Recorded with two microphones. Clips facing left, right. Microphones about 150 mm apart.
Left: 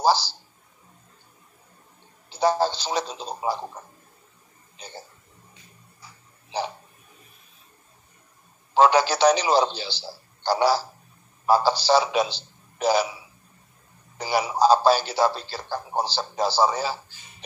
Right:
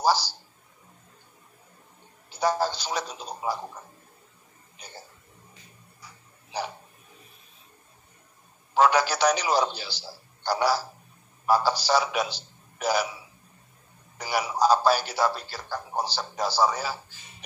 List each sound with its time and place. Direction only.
0.0 s a man's voice: 30° left (ahead or behind)
2.2 s a man's voice: 30° left (ahead or behind)
8.7 s a man's voice: 30° left (ahead or behind)
14.1 s a man's voice: 30° left (ahead or behind)